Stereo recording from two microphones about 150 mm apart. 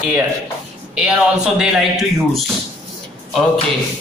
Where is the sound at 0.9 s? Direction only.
5° right (ahead or behind).